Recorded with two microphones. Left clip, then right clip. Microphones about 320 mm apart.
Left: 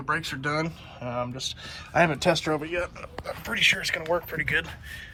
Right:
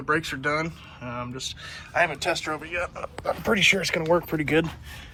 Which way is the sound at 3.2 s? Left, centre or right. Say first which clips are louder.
Right 3 dB; centre.